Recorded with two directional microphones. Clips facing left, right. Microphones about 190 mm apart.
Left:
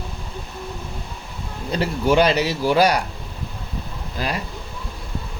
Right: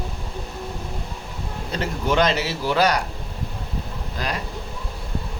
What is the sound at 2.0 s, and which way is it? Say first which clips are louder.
Speech: left 4 dB; 10° left (ahead or behind).